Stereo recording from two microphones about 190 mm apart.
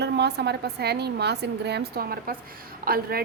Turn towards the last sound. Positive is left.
turn(degrees=-50)  # may be behind; listen again after turning